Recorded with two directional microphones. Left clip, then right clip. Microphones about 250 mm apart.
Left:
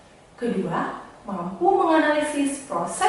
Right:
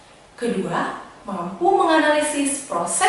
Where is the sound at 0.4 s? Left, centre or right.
Centre.